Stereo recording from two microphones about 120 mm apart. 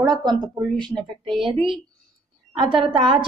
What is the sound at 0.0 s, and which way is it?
Speech, 35° right (ahead or behind).